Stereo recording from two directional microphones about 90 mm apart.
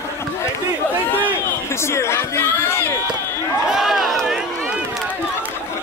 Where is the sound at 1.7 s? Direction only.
30° left (ahead or behind).